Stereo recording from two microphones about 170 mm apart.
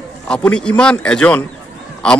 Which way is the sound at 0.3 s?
5° left (ahead or behind).